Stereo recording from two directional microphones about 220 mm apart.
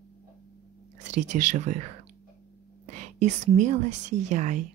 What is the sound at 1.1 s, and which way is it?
A woman's voice, 35° right (ahead or behind).